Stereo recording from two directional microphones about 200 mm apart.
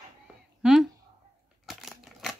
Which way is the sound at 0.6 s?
5° right (ahead or behind).